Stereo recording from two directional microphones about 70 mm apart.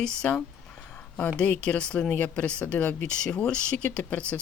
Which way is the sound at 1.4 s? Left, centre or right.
Centre.